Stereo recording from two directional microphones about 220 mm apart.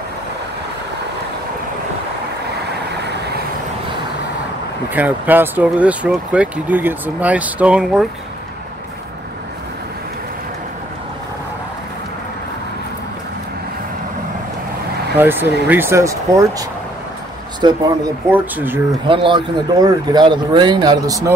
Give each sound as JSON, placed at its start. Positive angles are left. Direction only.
{"t": 4.8, "sound": "speech", "side_deg": -5}
{"t": 15.1, "sound": "speech", "side_deg": -10}
{"t": 18.3, "sound": "speech", "side_deg": -10}
{"t": 19.0, "sound": "speech", "side_deg": -25}